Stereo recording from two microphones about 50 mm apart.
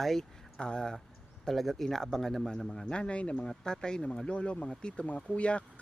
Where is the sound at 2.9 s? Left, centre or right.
Left.